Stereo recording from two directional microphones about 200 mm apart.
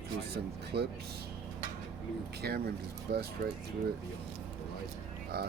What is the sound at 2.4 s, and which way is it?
Speech, 55° right (ahead or behind).